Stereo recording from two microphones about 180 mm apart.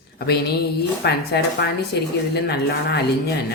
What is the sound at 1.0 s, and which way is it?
Speech, 65° left (ahead or behind).